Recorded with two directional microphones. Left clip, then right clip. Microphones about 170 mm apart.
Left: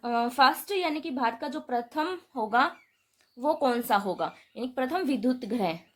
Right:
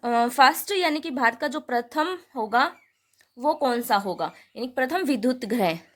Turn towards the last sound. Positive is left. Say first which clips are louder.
# right 5 dB
turn(degrees=-60)  # may be behind; listen again after turning